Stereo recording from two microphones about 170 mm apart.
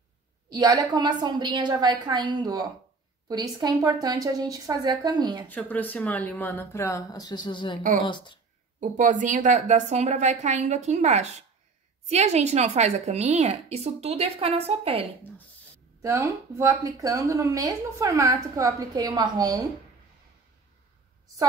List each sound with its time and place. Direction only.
0.5 s a woman's voice: 25° right (ahead or behind)
5.5 s speech: 10° left (ahead or behind); by 8.4 s 25° left (ahead or behind)
8.7 s a woman's voice: 50° right (ahead or behind)
16.0 s a woman's voice: 15° right (ahead or behind)